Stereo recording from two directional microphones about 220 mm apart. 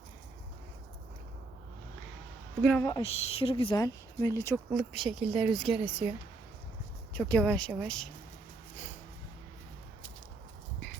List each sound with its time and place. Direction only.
2.6 s a woman's voice: 5° left (ahead or behind)
3.0 s speech: 25° left (ahead or behind)
4.7 s speech: centre (ahead or behind)
7.1 s speech: 5° left (ahead or behind)